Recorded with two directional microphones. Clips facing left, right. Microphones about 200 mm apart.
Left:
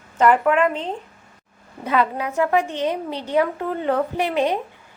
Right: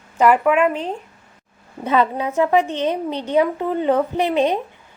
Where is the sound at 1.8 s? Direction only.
25° right (ahead or behind).